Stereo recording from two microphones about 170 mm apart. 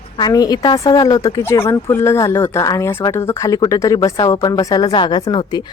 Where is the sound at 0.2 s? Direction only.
25° left (ahead or behind).